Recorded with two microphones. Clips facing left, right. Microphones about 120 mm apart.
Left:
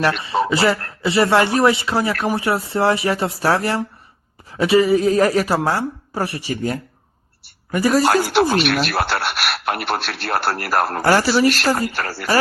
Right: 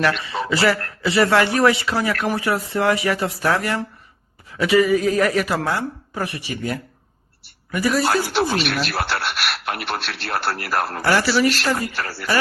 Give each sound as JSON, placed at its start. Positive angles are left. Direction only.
{"t": 0.2, "sound": "speech", "side_deg": 25}
{"t": 8.3, "sound": "speech", "side_deg": 60}